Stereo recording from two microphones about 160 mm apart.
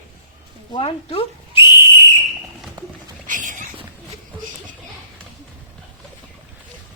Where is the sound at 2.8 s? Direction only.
30° right (ahead or behind).